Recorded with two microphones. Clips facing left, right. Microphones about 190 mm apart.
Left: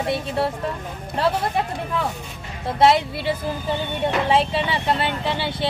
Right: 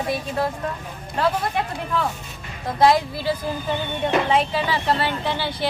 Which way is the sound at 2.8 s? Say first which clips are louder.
Even; 25° left (ahead or behind).